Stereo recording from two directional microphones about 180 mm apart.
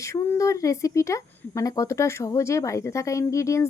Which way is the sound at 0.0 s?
15° left (ahead or behind).